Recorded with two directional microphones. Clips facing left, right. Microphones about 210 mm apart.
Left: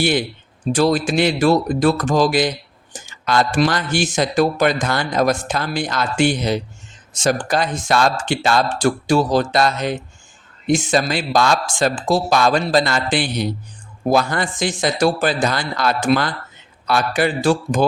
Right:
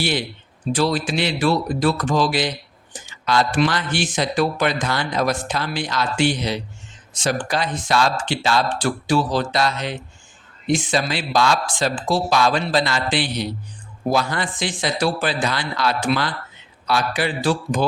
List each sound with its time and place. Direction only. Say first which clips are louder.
0.0 s speech: left 5 dB; 50° left (ahead or behind)